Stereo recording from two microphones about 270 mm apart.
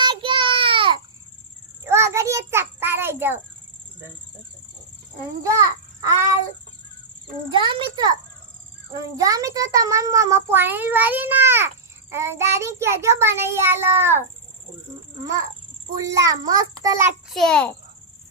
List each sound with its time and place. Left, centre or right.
0.0 s child singing: centre
1.8 s a sound: centre
5.4 s a child's voice: centre
7.5 s a child's voice: centre
9.1 s a child's voice: centre
16.0 s a child's voice: centre